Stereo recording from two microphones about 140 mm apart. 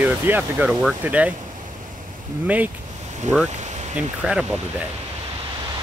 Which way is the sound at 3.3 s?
55° right (ahead or behind).